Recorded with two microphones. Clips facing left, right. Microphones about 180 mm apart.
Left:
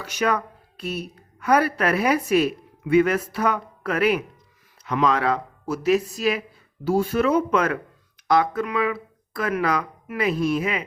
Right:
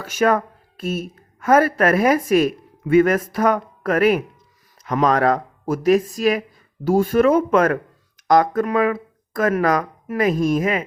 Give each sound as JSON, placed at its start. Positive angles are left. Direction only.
{"t": 0.0, "sound": "speech", "side_deg": -45}